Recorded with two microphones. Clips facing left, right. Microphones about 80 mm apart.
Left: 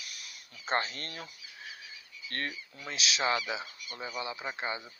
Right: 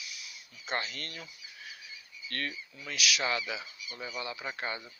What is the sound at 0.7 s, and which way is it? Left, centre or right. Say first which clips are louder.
Speech: left 4 dB; left.